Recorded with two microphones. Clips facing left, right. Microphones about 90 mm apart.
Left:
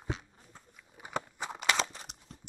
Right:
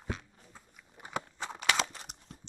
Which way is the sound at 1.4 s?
5° left (ahead or behind).